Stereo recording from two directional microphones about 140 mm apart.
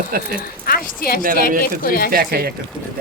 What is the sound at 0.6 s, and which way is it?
A woman's voice, 90° left.